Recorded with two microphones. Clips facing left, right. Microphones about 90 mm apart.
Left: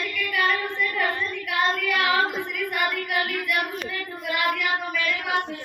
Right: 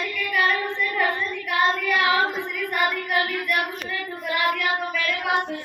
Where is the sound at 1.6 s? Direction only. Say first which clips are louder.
Right 2 dB; 15° right (ahead or behind).